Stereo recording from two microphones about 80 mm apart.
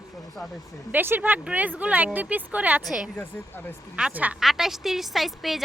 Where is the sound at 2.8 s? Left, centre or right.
Centre.